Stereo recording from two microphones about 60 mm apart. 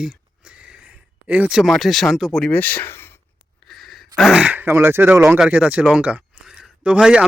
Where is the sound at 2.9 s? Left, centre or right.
Left.